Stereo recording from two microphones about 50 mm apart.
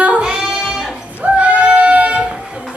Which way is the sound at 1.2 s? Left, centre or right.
Right.